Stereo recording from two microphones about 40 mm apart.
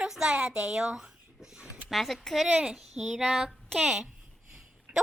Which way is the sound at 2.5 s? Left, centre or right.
Right.